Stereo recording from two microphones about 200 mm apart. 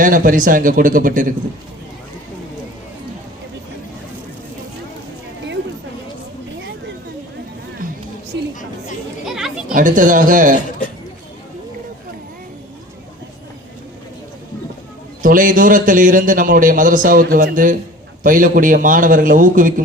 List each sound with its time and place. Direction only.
0.0 s a man's voice: 45° right (ahead or behind)
9.2 s children playing: centre (ahead or behind)
9.7 s a man's voice: 40° right (ahead or behind)
15.2 s a man's voice: 40° right (ahead or behind)